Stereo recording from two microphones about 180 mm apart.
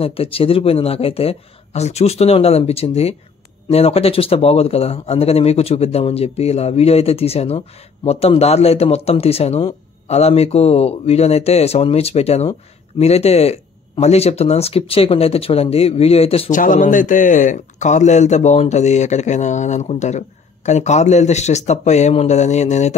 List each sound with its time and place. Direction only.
0.0 s speech: 30° left (ahead or behind)